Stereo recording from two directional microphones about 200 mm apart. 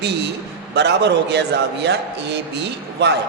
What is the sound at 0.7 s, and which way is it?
A man's voice, 55° right (ahead or behind).